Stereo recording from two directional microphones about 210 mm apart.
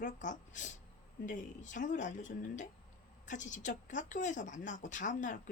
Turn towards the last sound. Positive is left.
turn(degrees=40)  # may be behind; listen again after turning